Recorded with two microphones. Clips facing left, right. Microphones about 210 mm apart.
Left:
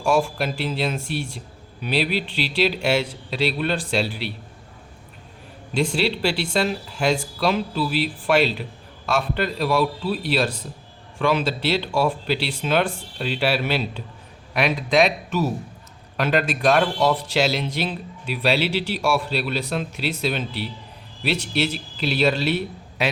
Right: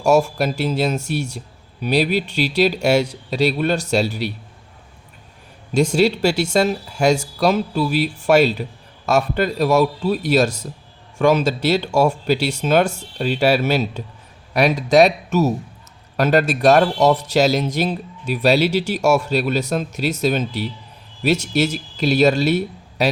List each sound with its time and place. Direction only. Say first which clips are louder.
0.0 s speech: right 5 dB; 40° right (ahead or behind)
5.7 s speech: right 6 dB; 45° right (ahead or behind)